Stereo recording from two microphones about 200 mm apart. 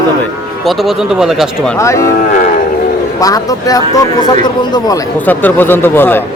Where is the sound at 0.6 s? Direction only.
Centre (ahead or behind).